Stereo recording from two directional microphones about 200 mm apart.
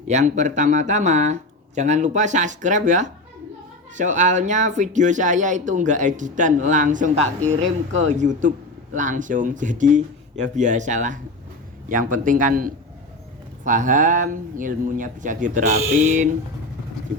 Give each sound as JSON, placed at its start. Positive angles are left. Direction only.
{"t": 0.1, "sound": "speech", "side_deg": -35}